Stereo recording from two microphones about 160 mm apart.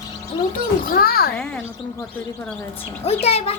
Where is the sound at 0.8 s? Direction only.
65° left (ahead or behind).